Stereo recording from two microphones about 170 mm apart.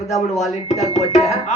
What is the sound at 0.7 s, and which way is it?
Speech, 40° left (ahead or behind).